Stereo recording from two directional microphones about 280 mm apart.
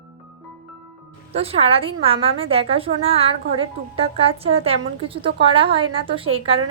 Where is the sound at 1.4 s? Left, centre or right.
Right.